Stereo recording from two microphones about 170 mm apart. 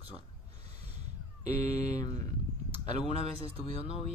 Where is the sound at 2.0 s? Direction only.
25° left (ahead or behind).